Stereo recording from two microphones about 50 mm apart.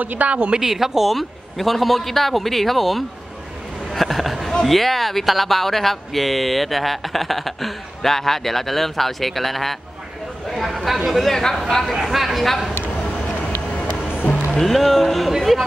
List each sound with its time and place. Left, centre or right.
0.0 s a woman's voice: right
0.6 s speech: centre
3.9 s a sound: centre
4.6 s speech: centre
10.5 s chatter: centre
11.1 s speech: centre
11.9 s speech: centre
12.7 s vehicle: left
14.5 s speech: centre